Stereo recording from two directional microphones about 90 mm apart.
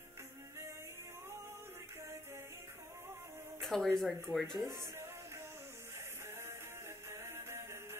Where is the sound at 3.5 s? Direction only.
5° left (ahead or behind).